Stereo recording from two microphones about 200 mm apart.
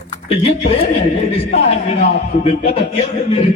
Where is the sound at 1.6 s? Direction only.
30° left (ahead or behind).